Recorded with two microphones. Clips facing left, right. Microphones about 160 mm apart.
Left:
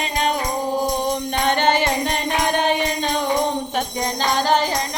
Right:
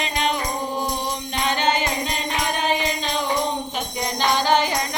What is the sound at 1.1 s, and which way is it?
Music, 55° left (ahead or behind).